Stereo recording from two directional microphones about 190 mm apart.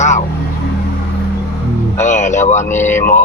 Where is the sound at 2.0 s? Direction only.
40° left (ahead or behind).